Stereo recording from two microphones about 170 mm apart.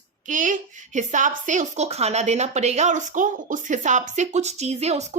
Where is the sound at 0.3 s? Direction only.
50° right (ahead or behind).